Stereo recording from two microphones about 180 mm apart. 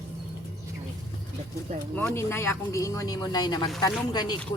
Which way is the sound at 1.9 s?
15° left (ahead or behind).